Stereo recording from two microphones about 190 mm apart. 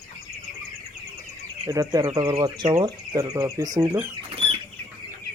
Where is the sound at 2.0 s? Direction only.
30° right (ahead or behind).